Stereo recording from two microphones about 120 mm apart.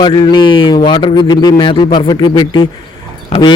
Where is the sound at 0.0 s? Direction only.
40° left (ahead or behind).